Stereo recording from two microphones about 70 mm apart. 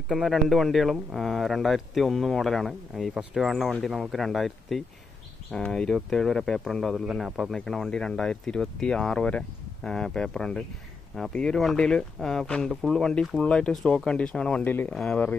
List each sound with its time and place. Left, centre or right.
0.1 s speech: centre
14.6 s speech: left
14.9 s speech: centre